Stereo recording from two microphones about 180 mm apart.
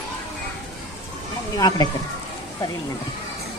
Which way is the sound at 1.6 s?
25° left (ahead or behind).